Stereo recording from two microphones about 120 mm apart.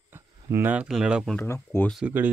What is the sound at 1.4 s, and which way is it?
Speech, 20° left (ahead or behind).